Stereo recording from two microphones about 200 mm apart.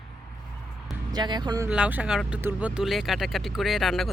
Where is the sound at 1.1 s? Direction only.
20° right (ahead or behind).